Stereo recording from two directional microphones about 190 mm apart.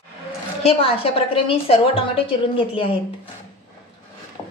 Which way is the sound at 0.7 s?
30° left (ahead or behind).